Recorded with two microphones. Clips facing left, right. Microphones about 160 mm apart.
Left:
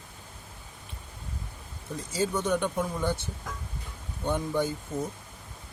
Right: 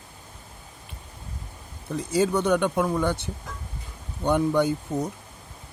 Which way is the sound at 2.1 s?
65° right (ahead or behind).